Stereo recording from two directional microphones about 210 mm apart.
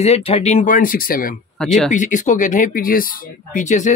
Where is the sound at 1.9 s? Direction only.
35° left (ahead or behind).